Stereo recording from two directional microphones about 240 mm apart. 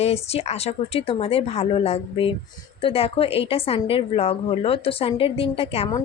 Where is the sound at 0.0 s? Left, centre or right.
Left.